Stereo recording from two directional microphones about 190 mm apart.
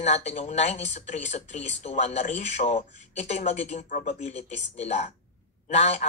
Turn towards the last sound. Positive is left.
turn(degrees=35)  # may be behind; listen again after turning